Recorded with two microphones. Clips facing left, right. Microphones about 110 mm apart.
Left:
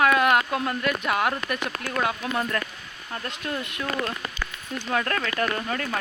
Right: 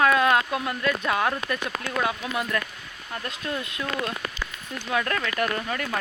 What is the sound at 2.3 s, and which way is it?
Speech, 30° left (ahead or behind).